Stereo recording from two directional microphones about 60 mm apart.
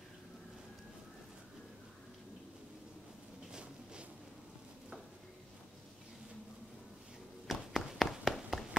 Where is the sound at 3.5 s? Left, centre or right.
Centre.